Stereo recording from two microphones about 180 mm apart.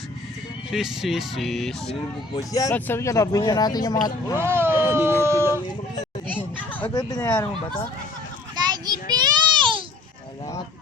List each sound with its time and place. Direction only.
0.7 s speech: centre (ahead or behind)
2.3 s speech: 20° left (ahead or behind)
4.4 s speech: 15° right (ahead or behind)
6.2 s children playing: 10° left (ahead or behind)
6.8 s speech: 20° left (ahead or behind)
8.5 s child singing: 20° right (ahead or behind)